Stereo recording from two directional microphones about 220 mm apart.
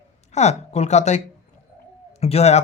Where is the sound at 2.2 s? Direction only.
30° left (ahead or behind).